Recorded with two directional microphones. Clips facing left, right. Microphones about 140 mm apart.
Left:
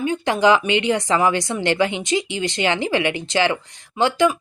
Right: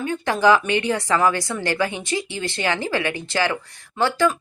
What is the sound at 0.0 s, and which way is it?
A woman's voice, 20° left (ahead or behind).